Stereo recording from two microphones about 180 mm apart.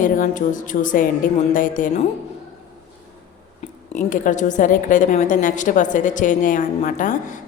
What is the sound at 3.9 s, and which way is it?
A woman's voice, 45° left (ahead or behind).